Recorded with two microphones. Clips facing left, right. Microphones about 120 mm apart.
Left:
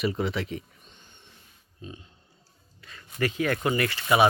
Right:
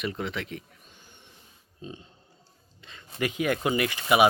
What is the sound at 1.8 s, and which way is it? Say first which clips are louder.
Speech: right 2 dB; 30° right (ahead or behind).